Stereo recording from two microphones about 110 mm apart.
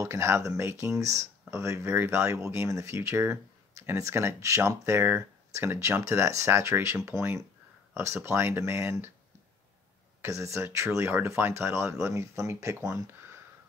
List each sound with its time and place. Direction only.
0.0 s speech: 25° right (ahead or behind)
10.2 s speech: 25° right (ahead or behind)
12.9 s a sound: 25° right (ahead or behind)